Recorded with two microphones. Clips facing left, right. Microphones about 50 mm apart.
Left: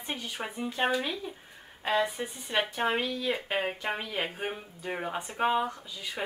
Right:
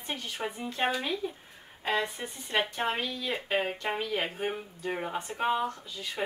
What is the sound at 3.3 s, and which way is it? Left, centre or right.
A woman's voice, centre.